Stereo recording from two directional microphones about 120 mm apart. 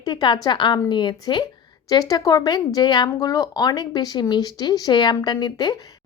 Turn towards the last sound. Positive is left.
turn(degrees=40)  # may be behind; listen again after turning